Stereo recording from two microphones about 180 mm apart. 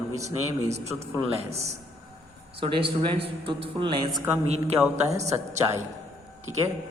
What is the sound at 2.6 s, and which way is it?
A man's voice, 30° right (ahead or behind).